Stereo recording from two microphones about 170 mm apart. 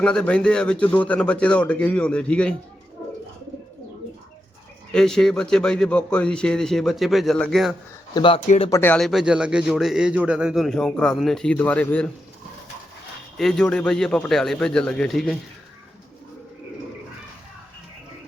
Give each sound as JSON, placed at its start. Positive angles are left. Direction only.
{"t": 0.0, "sound": "a man's voice", "side_deg": 5}
{"t": 4.9, "sound": "a man's voice", "side_deg": 5}
{"t": 8.1, "sound": "speech", "side_deg": 30}
{"t": 8.7, "sound": "a man's voice", "side_deg": 10}
{"t": 13.3, "sound": "a man's voice", "side_deg": 5}